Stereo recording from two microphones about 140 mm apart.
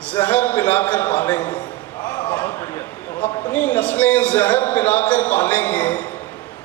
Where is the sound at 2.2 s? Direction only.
10° left (ahead or behind).